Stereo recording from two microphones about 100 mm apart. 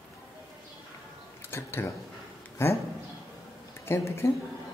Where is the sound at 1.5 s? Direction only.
25° left (ahead or behind).